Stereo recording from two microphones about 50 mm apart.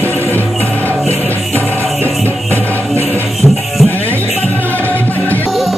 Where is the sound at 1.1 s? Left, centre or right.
Left.